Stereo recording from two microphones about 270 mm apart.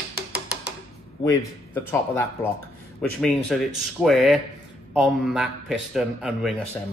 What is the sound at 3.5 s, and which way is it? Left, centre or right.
A man's voice, centre.